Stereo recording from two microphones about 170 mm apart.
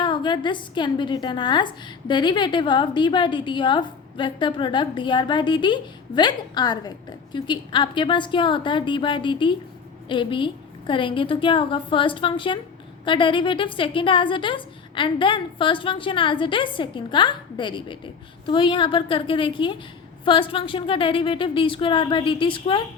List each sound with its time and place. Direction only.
0.0 s a woman's voice: 30° left (ahead or behind)